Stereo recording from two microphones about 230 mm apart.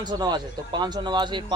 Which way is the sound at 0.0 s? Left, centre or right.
Centre.